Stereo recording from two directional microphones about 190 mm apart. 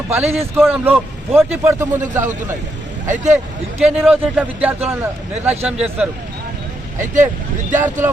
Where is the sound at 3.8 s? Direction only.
5° right (ahead or behind).